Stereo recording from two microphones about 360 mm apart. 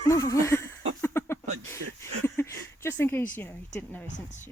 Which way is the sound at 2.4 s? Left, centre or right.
Centre.